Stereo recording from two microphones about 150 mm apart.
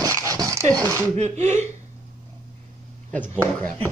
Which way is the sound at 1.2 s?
50° right (ahead or behind).